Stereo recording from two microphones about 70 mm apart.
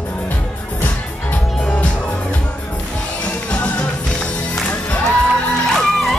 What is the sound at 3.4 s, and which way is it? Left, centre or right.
Music, centre.